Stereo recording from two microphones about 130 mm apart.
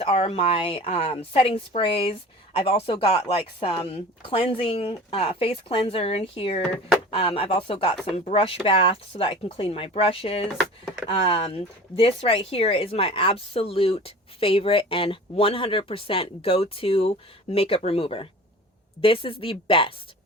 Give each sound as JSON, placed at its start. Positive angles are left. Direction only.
{"t": 0.0, "sound": "a woman's voice", "side_deg": 50}